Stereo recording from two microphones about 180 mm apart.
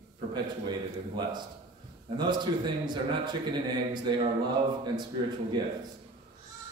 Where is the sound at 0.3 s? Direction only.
25° right (ahead or behind).